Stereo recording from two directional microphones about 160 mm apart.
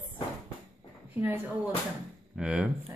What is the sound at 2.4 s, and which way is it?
Speech, 5° right (ahead or behind).